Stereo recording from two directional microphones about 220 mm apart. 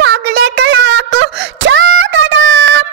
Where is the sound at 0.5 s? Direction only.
60° right (ahead or behind).